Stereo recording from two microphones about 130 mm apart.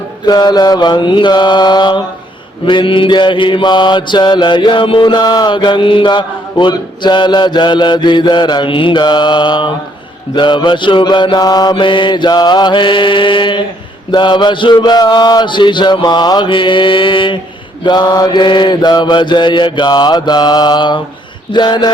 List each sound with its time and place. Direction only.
0.3 s mantra: 30° left (ahead or behind)